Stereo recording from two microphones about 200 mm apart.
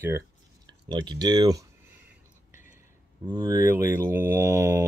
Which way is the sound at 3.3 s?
20° right (ahead or behind).